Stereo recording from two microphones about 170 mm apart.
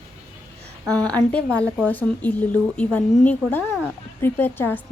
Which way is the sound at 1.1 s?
5° left (ahead or behind).